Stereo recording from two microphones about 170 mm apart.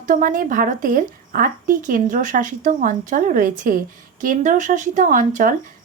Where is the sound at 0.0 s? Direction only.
50° right (ahead or behind).